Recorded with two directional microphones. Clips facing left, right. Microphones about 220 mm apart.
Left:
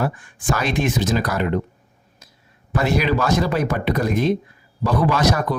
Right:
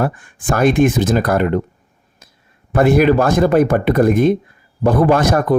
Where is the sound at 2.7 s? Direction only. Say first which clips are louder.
Right 8 dB; 55° right (ahead or behind).